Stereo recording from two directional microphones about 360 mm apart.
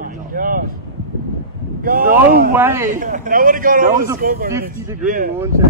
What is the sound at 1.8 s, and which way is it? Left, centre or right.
Speech, right.